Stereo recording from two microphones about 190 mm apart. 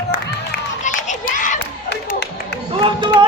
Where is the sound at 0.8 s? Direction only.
40° left (ahead or behind).